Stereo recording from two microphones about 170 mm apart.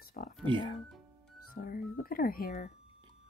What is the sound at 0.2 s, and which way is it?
Music, 50° left (ahead or behind).